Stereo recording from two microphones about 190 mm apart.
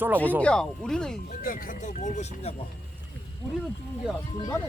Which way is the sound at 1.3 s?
50° left (ahead or behind).